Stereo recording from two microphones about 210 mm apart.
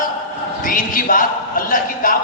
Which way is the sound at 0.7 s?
40° left (ahead or behind).